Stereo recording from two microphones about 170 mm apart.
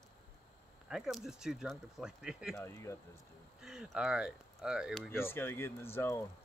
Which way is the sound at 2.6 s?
15° left (ahead or behind).